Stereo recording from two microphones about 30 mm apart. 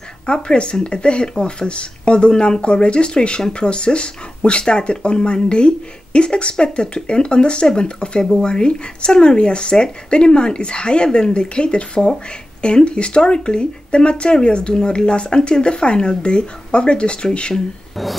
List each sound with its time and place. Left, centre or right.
0.3 s speech: left
14.7 s speech: left